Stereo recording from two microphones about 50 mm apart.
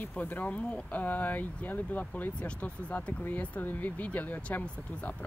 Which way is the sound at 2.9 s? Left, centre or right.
Left.